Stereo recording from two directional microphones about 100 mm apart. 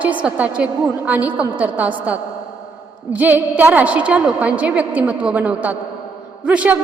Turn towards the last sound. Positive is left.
turn(degrees=-15)  # may be behind; listen again after turning